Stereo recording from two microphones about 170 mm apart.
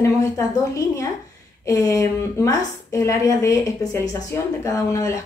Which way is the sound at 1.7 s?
20° left (ahead or behind).